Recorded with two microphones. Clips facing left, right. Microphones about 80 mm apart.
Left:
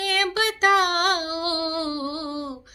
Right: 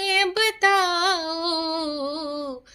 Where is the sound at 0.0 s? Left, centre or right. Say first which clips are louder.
Right 1 dB; left.